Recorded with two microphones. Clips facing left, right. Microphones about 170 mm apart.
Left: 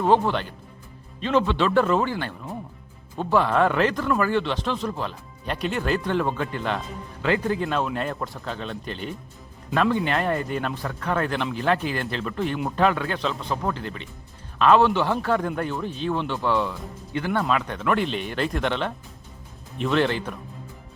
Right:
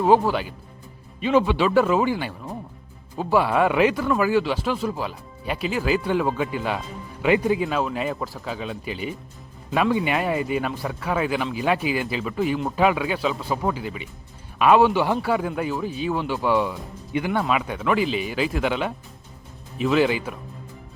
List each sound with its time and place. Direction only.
0.0 s speech: 5° right (ahead or behind)
7.6 s speech: 5° right (ahead or behind)